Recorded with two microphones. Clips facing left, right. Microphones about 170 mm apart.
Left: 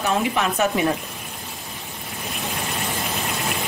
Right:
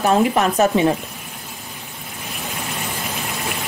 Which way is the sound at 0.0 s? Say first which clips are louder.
Right 6 dB; 40° right (ahead or behind).